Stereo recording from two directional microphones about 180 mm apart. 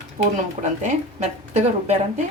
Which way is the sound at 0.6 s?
40° right (ahead or behind).